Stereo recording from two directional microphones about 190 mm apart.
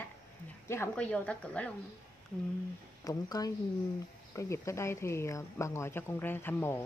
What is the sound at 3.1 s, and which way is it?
Speech, 20° left (ahead or behind).